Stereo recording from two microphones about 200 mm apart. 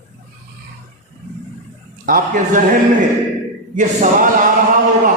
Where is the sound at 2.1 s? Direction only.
45° right (ahead or behind).